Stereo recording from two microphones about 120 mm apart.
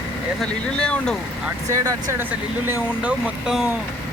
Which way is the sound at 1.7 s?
30° right (ahead or behind).